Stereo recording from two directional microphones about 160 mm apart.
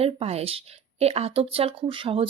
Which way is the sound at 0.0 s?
40° right (ahead or behind).